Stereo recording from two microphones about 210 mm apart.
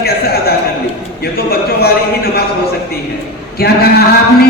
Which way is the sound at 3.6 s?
50° left (ahead or behind).